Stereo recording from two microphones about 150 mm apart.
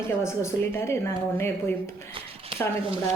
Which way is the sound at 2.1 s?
35° right (ahead or behind).